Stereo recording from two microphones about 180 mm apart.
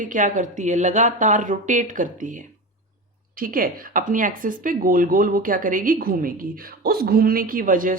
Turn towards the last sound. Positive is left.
turn(degrees=-50)  # may be behind; listen again after turning